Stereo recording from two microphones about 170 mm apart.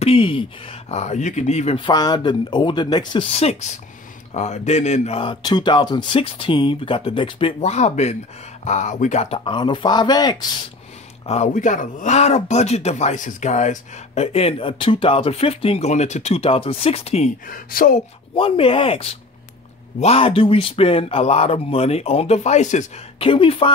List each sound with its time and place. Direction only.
0.0 s speech: 35° left (ahead or behind)
1.8 s speech: 25° left (ahead or behind)
11.2 s speech: 40° left (ahead or behind)
17.5 s speech: 55° left (ahead or behind)
18.3 s speech: 30° left (ahead or behind)